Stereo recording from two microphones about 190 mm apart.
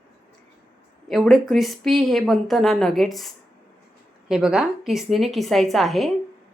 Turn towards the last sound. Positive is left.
turn(degrees=0)  # may be behind; listen again after turning